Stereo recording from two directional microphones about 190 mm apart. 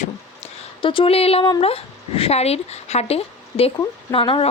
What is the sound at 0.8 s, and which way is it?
A woman's voice, 25° left (ahead or behind).